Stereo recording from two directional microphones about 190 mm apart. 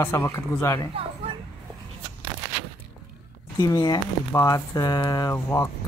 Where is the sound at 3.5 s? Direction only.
20° left (ahead or behind).